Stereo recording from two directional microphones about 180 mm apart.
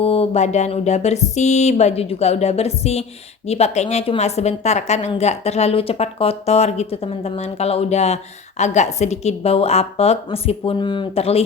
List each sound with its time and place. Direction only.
0.0 s a woman's voice: 35° left (ahead or behind)